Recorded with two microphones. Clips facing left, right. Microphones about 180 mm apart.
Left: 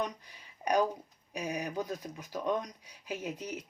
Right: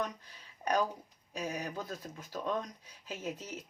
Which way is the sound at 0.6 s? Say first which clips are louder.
Left 3 dB; 15° left (ahead or behind).